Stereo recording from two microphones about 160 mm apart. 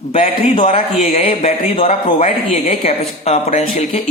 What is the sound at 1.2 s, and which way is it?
A man's voice, 40° left (ahead or behind).